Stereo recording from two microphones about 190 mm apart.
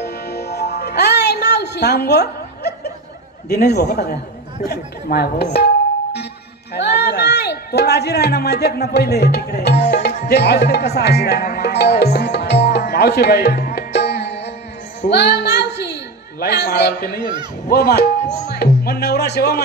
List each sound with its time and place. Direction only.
0.0 s music: 60° left (ahead or behind)
3.4 s speech: 55° left (ahead or behind)
6.7 s speech: 60° left (ahead or behind)
9.8 s music: 60° left (ahead or behind)
15.0 s a sound: 60° left (ahead or behind)
17.2 s speech: 25° right (ahead or behind)
17.6 s speech: 55° left (ahead or behind)